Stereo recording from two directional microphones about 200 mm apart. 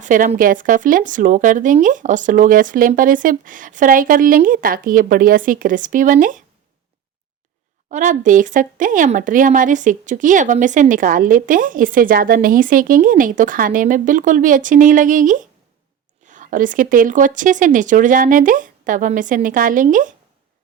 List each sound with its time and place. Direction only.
0.0 s speech: 40° right (ahead or behind)
7.9 s speech: 40° right (ahead or behind)